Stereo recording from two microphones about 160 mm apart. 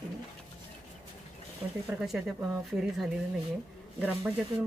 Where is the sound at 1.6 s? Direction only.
15° right (ahead or behind).